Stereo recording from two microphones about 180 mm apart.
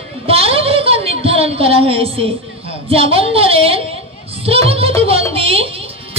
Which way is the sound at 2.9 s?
30° right (ahead or behind).